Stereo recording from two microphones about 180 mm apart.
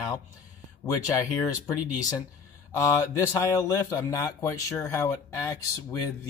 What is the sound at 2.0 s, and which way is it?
Speech, 20° left (ahead or behind).